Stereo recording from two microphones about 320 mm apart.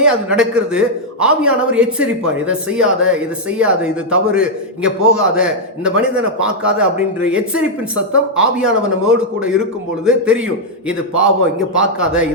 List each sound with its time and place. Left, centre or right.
0.0 s a man's voice: centre